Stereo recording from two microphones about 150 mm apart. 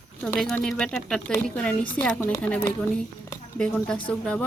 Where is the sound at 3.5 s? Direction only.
5° left (ahead or behind).